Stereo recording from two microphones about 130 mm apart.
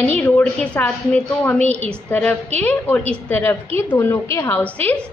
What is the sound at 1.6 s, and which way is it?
Speech, 55° right (ahead or behind).